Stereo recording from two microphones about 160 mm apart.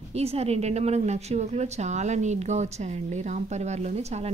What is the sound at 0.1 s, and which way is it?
A woman's voice, 40° right (ahead or behind).